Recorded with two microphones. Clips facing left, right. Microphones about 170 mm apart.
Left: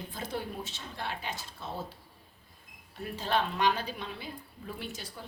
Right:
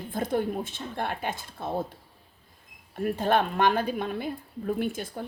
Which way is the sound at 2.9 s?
55° right (ahead or behind).